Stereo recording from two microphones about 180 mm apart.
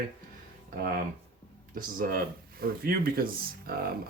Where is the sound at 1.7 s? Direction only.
55° right (ahead or behind).